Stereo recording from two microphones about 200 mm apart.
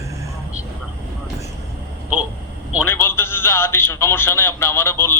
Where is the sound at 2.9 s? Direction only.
10° left (ahead or behind).